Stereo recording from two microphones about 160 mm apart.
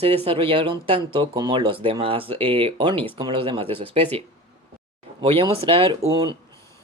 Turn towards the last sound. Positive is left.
turn(degrees=-30)  # may be behind; listen again after turning